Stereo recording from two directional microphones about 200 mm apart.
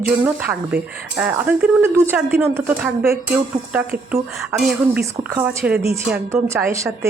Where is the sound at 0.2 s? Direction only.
5° right (ahead or behind).